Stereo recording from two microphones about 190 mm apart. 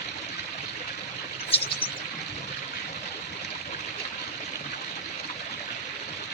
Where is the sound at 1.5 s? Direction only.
30° left (ahead or behind).